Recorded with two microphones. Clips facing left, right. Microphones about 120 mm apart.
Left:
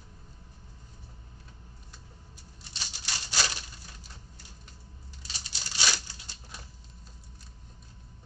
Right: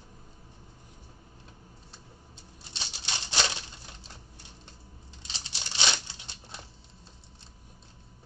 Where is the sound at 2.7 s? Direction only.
25° right (ahead or behind).